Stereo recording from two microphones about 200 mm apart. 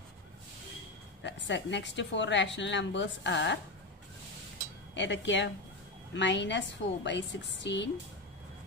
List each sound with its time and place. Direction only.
1.2 s a woman's voice: 60° left (ahead or behind)
4.9 s a woman's voice: 65° left (ahead or behind)